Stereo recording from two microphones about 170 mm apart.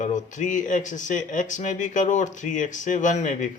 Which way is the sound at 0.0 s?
45° left (ahead or behind).